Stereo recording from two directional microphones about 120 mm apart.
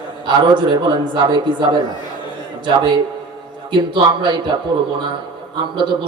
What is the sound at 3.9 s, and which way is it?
Speech, 45° right (ahead or behind).